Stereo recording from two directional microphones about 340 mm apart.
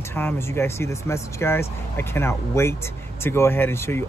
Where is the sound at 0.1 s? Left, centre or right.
Centre.